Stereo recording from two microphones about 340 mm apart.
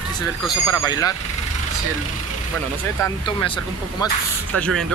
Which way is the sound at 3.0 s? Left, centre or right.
Centre.